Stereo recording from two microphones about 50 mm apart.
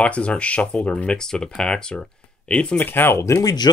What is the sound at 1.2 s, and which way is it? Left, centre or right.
Speech, centre.